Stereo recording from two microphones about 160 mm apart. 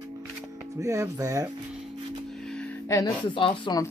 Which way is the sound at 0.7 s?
20° right (ahead or behind).